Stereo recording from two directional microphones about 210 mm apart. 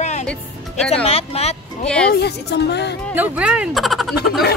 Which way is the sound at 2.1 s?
50° left (ahead or behind).